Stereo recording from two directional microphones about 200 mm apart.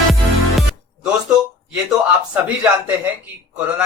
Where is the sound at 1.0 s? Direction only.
5° right (ahead or behind).